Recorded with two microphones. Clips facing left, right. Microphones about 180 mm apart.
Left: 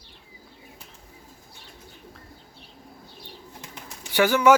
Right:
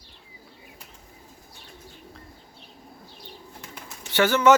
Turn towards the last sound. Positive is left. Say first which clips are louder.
# even
turn(degrees=10)  # may be behind; listen again after turning